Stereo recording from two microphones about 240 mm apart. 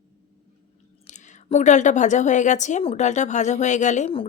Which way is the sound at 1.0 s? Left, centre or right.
Left.